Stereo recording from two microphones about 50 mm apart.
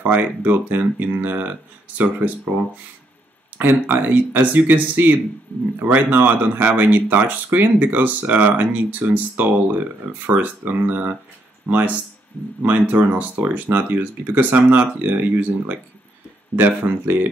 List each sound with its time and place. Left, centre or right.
0.0 s speech: right
3.8 s speech: right
12.6 s speech: right